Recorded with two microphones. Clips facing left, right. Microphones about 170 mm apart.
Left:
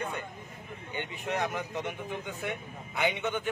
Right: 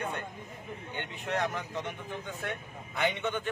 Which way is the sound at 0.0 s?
Centre (ahead or behind).